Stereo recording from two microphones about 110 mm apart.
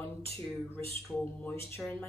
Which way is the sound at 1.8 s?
15° left (ahead or behind).